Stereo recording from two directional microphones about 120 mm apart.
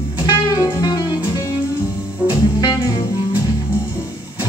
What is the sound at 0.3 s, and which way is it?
Music, 35° left (ahead or behind).